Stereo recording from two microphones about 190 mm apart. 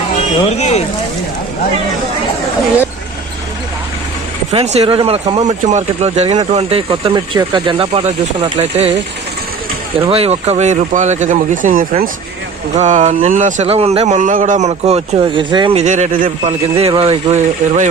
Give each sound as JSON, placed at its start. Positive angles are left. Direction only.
{"t": 0.5, "sound": "speech", "side_deg": 35}
{"t": 4.5, "sound": "speech", "side_deg": -35}
{"t": 10.1, "sound": "speech", "side_deg": -30}
{"t": 16.5, "sound": "speech", "side_deg": -30}